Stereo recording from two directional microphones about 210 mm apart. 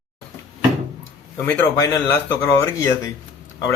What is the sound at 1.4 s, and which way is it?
Speech, 10° left (ahead or behind).